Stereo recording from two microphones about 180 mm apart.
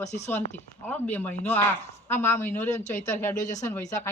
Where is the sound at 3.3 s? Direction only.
45° left (ahead or behind).